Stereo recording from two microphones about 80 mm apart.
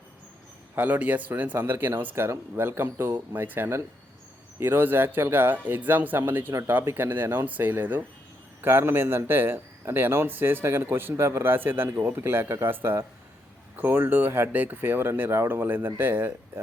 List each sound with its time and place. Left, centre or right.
0.8 s a man's voice: centre
6.5 s a man's voice: right